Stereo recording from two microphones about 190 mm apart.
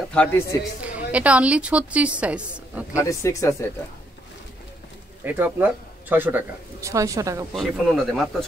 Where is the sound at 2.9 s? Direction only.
15° left (ahead or behind).